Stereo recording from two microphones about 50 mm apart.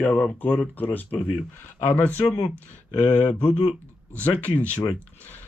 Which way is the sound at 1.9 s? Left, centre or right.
Left.